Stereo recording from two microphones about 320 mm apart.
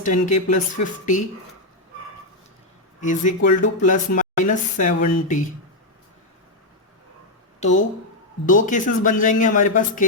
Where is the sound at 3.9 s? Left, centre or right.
Left.